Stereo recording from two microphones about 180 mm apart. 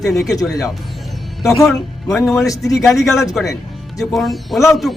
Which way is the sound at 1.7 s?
Centre (ahead or behind).